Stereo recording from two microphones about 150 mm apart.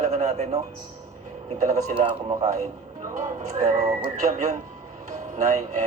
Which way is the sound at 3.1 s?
45° right (ahead or behind).